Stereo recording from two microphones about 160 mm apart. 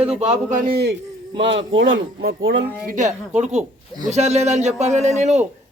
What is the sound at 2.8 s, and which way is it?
Speech, 50° right (ahead or behind).